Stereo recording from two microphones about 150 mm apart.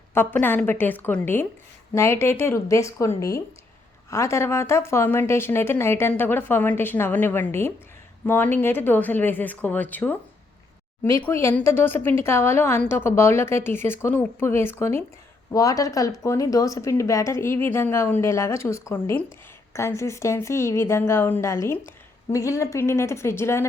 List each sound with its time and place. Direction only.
0.1 s speech: 15° left (ahead or behind)
11.2 s speech: 15° left (ahead or behind)